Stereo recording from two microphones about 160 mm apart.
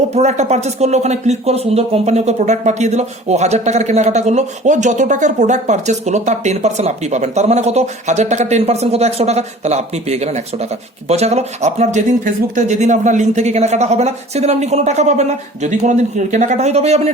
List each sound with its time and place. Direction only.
0.1 s speech: 45° right (ahead or behind)